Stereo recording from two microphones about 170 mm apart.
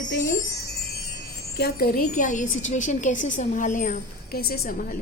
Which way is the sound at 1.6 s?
65° left (ahead or behind).